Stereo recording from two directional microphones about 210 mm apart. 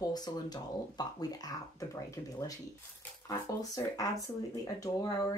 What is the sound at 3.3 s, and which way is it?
Speech, 15° left (ahead or behind).